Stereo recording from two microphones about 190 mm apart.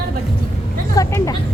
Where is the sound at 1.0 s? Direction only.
15° left (ahead or behind).